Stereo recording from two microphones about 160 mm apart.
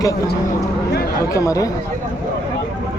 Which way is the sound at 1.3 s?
20° left (ahead or behind).